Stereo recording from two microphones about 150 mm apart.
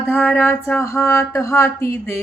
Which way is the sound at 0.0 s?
15° left (ahead or behind).